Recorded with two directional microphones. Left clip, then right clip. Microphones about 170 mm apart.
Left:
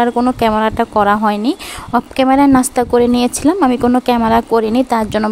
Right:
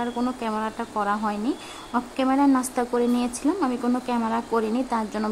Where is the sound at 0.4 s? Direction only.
55° left (ahead or behind).